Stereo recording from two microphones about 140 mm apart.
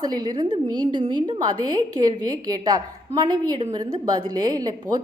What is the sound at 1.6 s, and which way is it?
A woman's voice, 30° right (ahead or behind).